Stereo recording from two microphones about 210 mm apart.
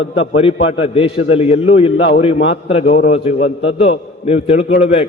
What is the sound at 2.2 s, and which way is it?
A man's voice, 30° left (ahead or behind).